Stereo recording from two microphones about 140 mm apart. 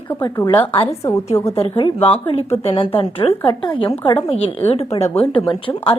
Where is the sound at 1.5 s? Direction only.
40° left (ahead or behind).